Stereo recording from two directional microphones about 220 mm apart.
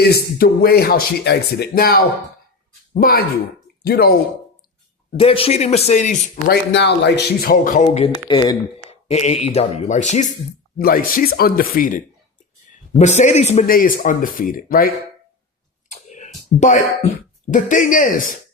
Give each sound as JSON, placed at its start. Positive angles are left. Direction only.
{"t": 0.0, "sound": "a man's voice", "side_deg": 45}
{"t": 5.1, "sound": "a man's voice", "side_deg": 25}
{"t": 6.7, "sound": "a man's voice", "side_deg": 50}
{"t": 15.9, "sound": "a sound", "side_deg": 35}
{"t": 17.5, "sound": "a man's voice", "side_deg": 35}